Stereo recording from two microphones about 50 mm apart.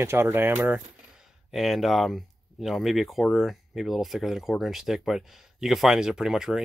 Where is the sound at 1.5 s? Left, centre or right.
Centre.